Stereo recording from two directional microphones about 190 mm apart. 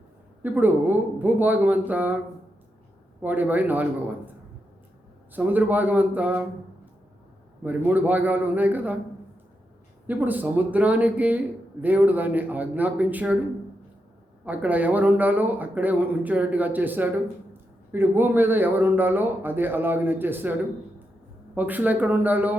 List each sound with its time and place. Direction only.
0.4 s a man's voice: 10° right (ahead or behind)
5.3 s a man's voice: 10° right (ahead or behind)
7.6 s a man's voice: 10° right (ahead or behind)
10.1 s a man's voice: 10° right (ahead or behind)
14.4 s a man's voice: 10° right (ahead or behind)